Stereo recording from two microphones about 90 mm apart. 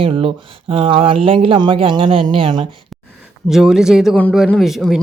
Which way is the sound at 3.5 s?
5° right (ahead or behind).